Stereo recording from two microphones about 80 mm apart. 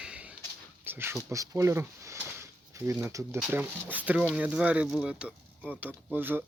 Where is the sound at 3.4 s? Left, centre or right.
Right.